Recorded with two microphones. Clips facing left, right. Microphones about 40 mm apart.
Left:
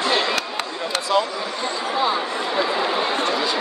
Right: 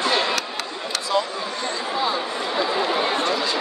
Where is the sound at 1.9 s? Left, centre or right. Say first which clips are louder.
Left 3 dB; centre.